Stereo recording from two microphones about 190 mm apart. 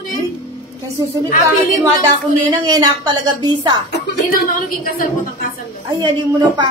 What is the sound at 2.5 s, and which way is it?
A child's voice, 20° right (ahead or behind).